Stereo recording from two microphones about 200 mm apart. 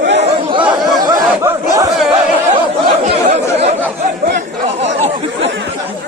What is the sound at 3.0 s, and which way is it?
Chatter, 35° right (ahead or behind).